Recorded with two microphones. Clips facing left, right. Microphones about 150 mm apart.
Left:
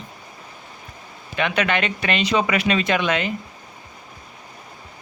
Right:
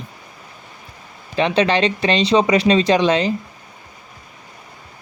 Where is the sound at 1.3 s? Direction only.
30° right (ahead or behind).